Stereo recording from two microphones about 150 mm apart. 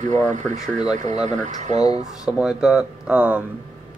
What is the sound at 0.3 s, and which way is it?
Speech, 50° right (ahead or behind).